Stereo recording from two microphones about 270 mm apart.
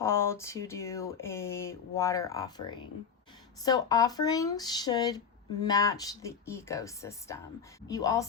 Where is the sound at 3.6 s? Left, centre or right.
Centre.